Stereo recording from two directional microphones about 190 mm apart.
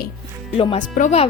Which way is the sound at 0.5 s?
30° left (ahead or behind).